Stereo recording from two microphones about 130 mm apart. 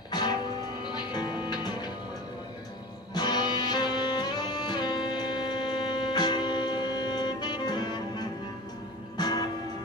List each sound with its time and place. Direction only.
0.1 s music: 35° left (ahead or behind)
3.2 s music: 35° left (ahead or behind)